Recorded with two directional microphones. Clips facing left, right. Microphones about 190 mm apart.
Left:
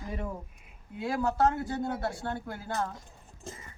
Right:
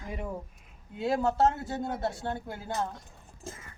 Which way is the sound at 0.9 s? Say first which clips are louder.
Right 2 dB; 25° right (ahead or behind).